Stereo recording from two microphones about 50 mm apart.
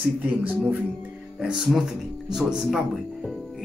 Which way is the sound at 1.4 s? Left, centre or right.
Centre.